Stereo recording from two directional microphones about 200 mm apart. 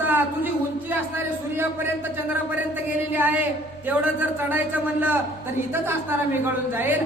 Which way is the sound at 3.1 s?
10° right (ahead or behind).